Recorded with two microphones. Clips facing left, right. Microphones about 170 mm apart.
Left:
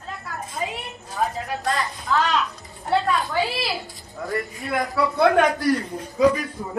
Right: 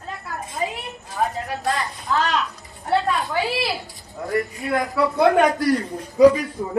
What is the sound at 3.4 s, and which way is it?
Speech, 20° right (ahead or behind).